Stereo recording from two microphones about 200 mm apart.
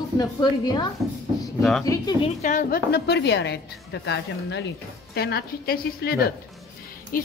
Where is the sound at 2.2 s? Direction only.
40° left (ahead or behind).